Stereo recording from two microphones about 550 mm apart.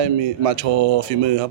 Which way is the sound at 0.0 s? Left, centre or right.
Right.